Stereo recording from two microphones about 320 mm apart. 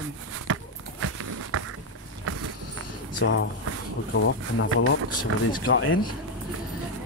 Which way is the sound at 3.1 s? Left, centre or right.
Left.